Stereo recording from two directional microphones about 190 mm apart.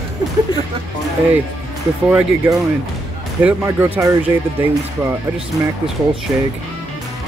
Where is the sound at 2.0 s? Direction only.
10° right (ahead or behind).